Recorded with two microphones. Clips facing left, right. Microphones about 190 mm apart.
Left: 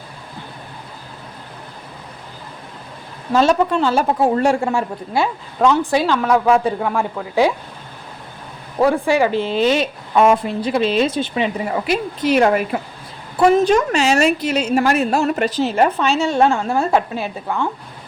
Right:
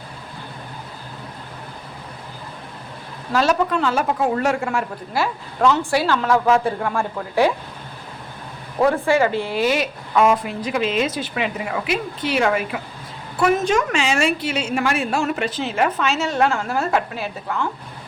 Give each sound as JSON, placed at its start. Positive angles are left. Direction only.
{"t": 3.3, "sound": "a woman's voice", "side_deg": 25}
{"t": 8.8, "sound": "a woman's voice", "side_deg": 15}